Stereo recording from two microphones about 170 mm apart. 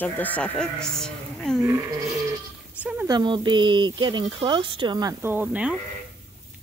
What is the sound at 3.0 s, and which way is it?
Speech, 25° right (ahead or behind).